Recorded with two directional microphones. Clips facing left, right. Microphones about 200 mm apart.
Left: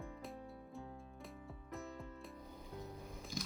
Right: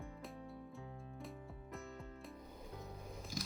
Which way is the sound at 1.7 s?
Centre (ahead or behind).